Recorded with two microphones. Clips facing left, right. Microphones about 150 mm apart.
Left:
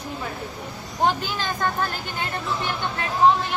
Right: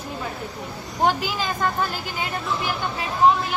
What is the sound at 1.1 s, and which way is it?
Speech, 5° right (ahead or behind).